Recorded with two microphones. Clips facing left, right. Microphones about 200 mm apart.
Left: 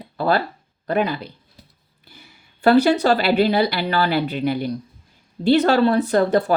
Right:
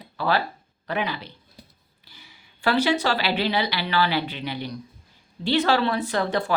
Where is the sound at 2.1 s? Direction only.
50° left (ahead or behind).